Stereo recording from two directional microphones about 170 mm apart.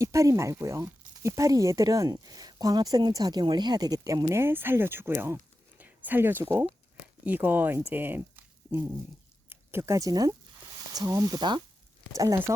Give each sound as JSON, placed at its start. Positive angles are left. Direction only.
{"t": 0.0, "sound": "speech", "side_deg": -20}
{"t": 7.9, "sound": "squish", "side_deg": -10}
{"t": 9.5, "sound": "speech", "side_deg": -15}